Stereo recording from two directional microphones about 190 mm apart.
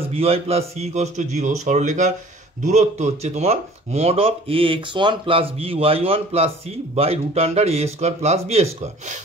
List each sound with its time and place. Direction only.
0.1 s speech: 30° right (ahead or behind)